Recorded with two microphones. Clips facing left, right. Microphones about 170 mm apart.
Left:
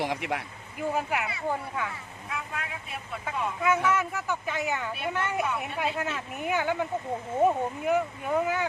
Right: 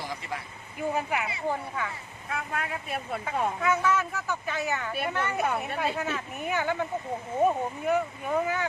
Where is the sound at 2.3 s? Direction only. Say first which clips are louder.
Right 4 dB; 50° right (ahead or behind).